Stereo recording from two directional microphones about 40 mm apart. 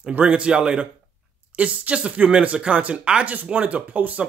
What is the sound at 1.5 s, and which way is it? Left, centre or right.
Speech, right.